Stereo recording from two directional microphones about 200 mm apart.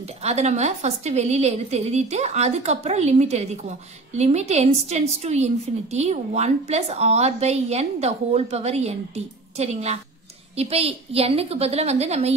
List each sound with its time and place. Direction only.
0.2 s a woman's voice: 35° right (ahead or behind)